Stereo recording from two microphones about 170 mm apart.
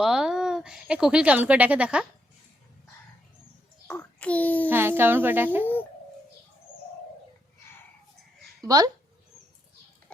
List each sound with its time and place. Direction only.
0.0 s speech: 5° right (ahead or behind)
3.8 s a sound: 5° left (ahead or behind)
4.7 s speech: 15° right (ahead or behind)
8.6 s speech: 20° right (ahead or behind)